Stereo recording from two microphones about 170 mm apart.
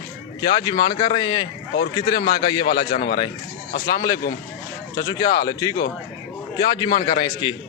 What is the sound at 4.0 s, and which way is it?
Speech, 20° left (ahead or behind).